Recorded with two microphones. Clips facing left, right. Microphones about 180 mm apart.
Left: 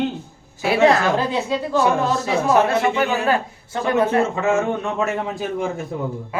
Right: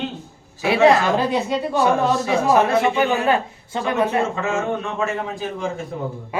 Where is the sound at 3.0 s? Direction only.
20° right (ahead or behind).